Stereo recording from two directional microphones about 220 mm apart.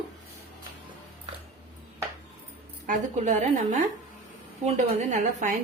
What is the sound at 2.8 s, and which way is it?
Speech, 35° right (ahead or behind).